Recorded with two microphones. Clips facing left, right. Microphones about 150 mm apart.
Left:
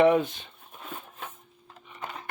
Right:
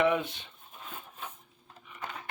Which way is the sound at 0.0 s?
40° left (ahead or behind).